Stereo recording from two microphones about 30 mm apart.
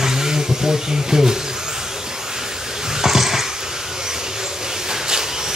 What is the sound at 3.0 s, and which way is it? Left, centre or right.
Dog, centre.